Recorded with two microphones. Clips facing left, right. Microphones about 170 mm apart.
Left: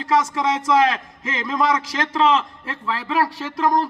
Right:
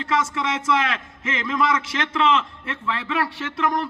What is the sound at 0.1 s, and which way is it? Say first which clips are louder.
A man's voice: left 5 dB; 35° left (ahead or behind).